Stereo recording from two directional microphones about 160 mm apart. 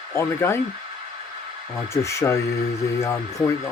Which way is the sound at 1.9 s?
20° left (ahead or behind).